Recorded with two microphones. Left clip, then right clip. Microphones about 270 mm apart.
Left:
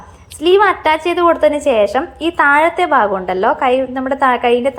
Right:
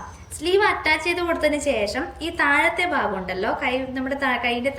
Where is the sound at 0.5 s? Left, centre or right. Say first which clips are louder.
Left 7 dB; centre.